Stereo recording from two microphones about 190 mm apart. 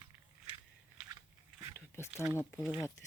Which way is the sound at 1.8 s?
10° left (ahead or behind).